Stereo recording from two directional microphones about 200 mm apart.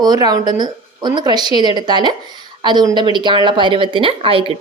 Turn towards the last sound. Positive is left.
turn(degrees=-25)  # may be behind; listen again after turning